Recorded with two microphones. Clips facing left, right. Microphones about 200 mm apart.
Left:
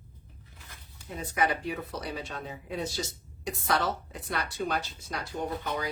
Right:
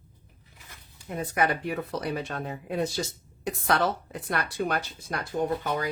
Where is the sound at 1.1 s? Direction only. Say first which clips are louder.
Right 3 dB; 55° right (ahead or behind).